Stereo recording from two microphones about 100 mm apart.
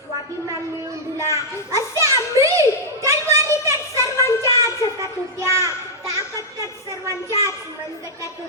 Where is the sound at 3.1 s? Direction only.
30° right (ahead or behind).